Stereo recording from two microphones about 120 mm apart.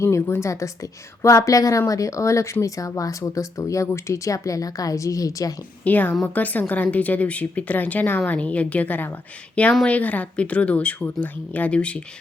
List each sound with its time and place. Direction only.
0.0 s speech: 20° left (ahead or behind)
5.8 s speech: 15° left (ahead or behind)